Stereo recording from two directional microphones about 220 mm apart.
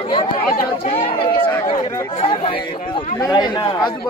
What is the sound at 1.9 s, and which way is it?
Chatter, 20° left (ahead or behind).